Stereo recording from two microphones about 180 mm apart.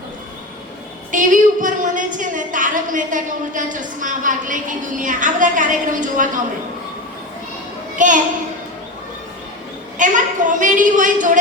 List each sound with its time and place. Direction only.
1.1 s a woman's voice: 45° right (ahead or behind)
7.9 s a child's voice: 45° right (ahead or behind)
10.0 s a woman's voice: 45° right (ahead or behind)